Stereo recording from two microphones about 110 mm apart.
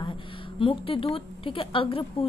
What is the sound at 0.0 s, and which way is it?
A woman's voice, 50° left (ahead or behind).